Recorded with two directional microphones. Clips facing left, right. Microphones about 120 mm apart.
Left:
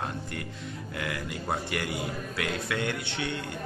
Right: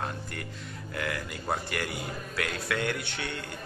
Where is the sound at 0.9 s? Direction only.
20° left (ahead or behind).